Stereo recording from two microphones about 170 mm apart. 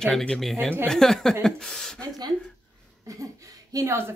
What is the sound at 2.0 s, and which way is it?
Speech, 25° right (ahead or behind).